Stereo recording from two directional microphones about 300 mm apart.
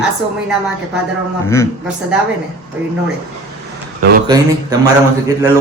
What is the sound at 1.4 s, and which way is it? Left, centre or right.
Speech, centre.